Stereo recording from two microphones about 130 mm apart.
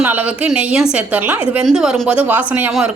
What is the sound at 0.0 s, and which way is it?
A woman's voice, 10° right (ahead or behind).